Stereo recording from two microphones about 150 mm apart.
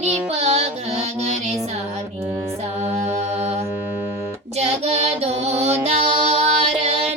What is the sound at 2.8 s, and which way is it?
Mantra, 45° right (ahead or behind).